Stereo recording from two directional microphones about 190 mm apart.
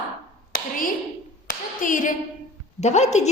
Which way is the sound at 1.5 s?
45° left (ahead or behind).